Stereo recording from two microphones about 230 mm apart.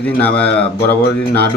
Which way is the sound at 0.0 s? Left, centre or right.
Centre.